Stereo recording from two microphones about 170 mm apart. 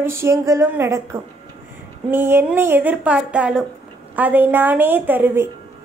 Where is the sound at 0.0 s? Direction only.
15° right (ahead or behind).